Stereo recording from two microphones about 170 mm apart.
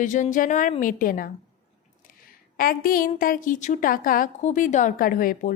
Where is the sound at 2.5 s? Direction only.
60° left (ahead or behind).